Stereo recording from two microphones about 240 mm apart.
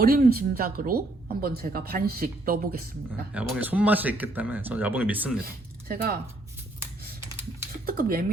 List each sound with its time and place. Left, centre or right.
0.0 s speech: right
3.3 s speech: centre
5.4 s speech: right
7.9 s speech: right